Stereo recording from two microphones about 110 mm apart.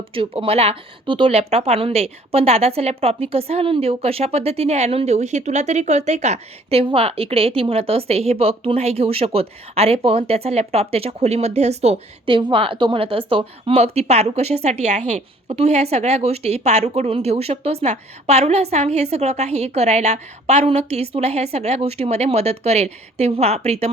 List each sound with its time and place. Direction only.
0.1 s a woman's voice: 55° right (ahead or behind); by 23.9 s 75° right (ahead or behind)